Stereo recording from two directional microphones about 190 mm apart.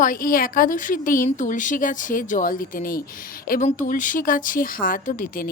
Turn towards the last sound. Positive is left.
turn(degrees=45)  # may be behind; listen again after turning